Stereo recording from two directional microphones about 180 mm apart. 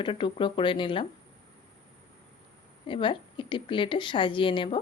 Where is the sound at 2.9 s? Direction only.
30° left (ahead or behind).